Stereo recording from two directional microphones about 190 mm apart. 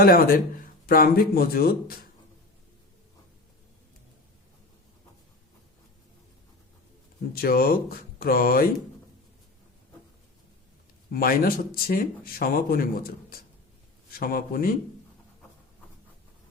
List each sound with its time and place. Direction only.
0.0 s speech: 50° left (ahead or behind)
7.3 s speech: 50° left (ahead or behind)
11.1 s speech: 50° left (ahead or behind)
14.1 s speech: 50° left (ahead or behind)